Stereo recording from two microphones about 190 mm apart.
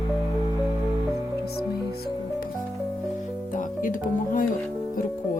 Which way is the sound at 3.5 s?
45° left (ahead or behind).